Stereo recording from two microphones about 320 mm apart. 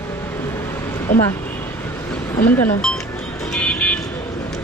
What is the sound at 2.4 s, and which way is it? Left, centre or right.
Speech, centre.